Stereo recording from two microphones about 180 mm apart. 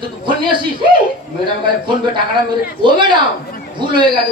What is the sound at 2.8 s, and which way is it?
Speech, 25° right (ahead or behind).